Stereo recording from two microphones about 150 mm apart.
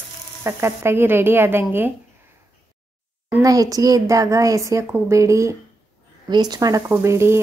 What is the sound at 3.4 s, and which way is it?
A woman's voice, 25° right (ahead or behind).